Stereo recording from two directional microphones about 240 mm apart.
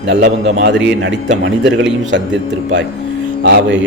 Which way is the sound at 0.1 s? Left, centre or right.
Right.